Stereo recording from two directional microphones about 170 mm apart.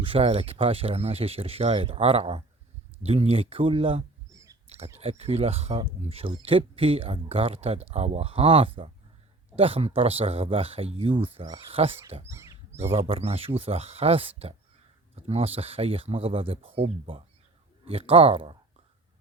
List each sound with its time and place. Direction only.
0.0 s speech: 35° right (ahead or behind)
12.3 s a sound: 15° right (ahead or behind)
13.1 s speech: 35° right (ahead or behind)